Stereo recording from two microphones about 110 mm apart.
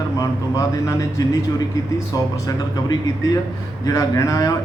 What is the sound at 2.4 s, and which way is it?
A man's voice, 30° left (ahead or behind).